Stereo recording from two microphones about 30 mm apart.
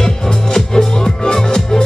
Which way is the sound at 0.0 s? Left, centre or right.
Centre.